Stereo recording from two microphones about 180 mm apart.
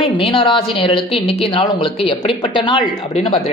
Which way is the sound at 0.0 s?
30° left (ahead or behind).